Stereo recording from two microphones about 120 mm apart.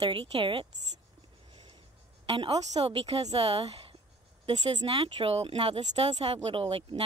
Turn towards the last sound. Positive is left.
turn(degrees=-55)  # may be behind; listen again after turning